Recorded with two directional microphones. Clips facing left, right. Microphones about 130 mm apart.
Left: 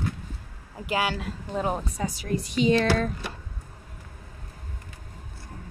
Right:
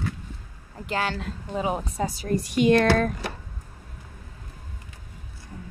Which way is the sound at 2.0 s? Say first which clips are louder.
Right 5 dB; 35° right (ahead or behind).